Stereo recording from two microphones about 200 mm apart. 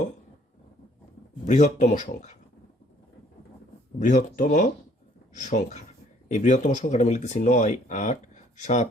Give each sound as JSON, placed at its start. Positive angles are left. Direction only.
{"t": 1.5, "sound": "speech", "side_deg": 35}
{"t": 4.0, "sound": "speech", "side_deg": 40}